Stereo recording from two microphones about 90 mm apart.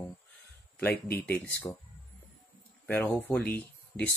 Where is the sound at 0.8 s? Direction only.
20° left (ahead or behind).